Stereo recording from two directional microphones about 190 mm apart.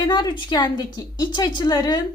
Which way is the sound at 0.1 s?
25° left (ahead or behind).